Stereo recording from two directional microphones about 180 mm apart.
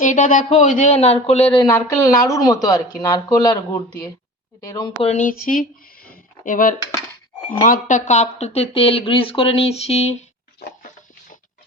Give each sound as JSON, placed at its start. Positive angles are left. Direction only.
{"t": 0.0, "sound": "speech", "side_deg": 45}
{"t": 1.6, "sound": "speech", "side_deg": 15}
{"t": 5.0, "sound": "speech", "side_deg": 45}